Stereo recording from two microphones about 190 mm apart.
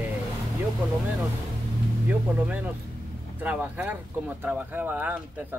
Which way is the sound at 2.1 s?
10° right (ahead or behind).